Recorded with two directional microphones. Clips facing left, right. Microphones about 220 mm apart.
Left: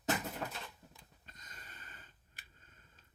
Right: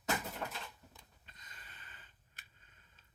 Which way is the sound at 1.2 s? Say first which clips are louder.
Left 6 dB; 45° left (ahead or behind).